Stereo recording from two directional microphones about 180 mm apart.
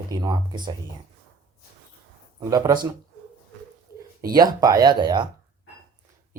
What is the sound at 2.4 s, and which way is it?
Speech, 20° right (ahead or behind).